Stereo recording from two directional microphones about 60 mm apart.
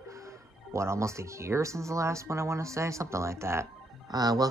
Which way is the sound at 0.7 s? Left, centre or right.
Right.